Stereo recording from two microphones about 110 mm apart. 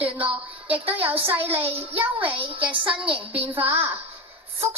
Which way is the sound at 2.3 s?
50° right (ahead or behind).